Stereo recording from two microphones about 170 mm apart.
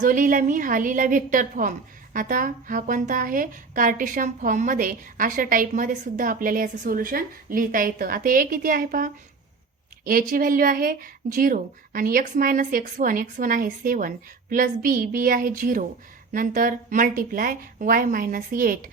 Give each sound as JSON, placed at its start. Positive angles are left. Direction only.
{"t": 0.0, "sound": "a woman's voice", "side_deg": -50}